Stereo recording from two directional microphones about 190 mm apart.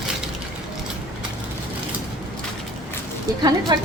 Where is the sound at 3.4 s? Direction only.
20° right (ahead or behind).